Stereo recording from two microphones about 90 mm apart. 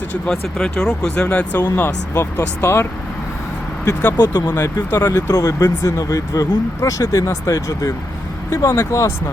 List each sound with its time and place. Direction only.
0.3 s speech: 5° left (ahead or behind)
0.9 s speech: 20° left (ahead or behind)
2.1 s speech: 30° left (ahead or behind)
4.3 s speech: 25° left (ahead or behind)
5.3 s speech: 40° left (ahead or behind)